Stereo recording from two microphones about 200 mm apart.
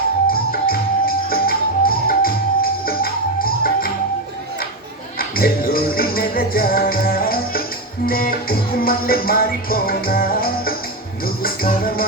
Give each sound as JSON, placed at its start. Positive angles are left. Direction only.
{"t": 0.3, "sound": "music", "side_deg": 50}
{"t": 5.4, "sound": "music", "side_deg": 50}